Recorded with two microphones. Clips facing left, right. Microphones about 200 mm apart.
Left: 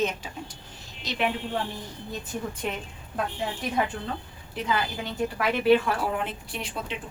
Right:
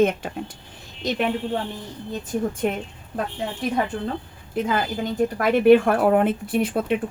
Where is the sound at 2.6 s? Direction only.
50° right (ahead or behind).